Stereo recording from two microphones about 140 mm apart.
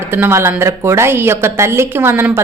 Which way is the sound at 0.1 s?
15° right (ahead or behind).